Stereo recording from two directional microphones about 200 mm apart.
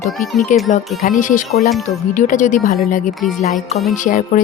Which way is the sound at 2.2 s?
40° left (ahead or behind).